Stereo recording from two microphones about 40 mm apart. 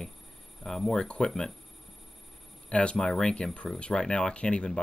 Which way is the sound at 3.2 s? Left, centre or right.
Left.